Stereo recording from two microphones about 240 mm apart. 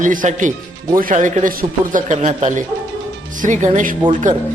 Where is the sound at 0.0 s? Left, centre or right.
Right.